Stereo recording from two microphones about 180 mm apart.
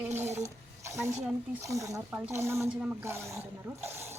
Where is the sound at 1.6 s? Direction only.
15° right (ahead or behind).